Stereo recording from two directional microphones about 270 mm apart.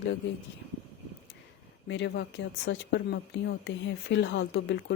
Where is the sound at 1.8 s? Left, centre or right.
Left.